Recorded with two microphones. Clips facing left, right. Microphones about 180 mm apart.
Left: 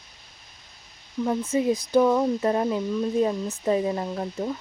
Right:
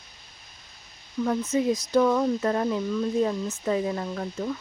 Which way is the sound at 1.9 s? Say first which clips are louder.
Left 2 dB; 15° left (ahead or behind).